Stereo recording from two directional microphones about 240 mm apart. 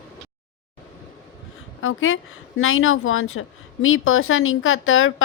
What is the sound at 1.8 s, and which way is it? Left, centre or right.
A woman's voice, left.